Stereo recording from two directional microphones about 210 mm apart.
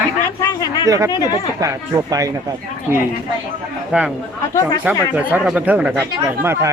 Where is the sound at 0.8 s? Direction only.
15° right (ahead or behind).